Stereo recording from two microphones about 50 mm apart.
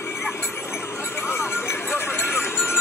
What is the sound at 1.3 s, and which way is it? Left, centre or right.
Clip-clop, left.